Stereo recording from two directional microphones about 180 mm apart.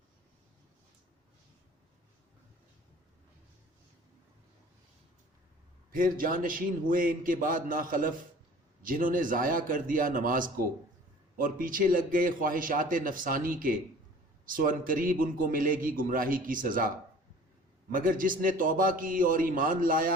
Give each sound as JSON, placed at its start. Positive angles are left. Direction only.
{"t": 5.9, "sound": "a man's voice", "side_deg": -50}
{"t": 17.9, "sound": "a man's voice", "side_deg": -50}